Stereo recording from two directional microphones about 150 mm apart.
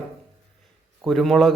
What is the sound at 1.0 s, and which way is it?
Speech, centre (ahead or behind).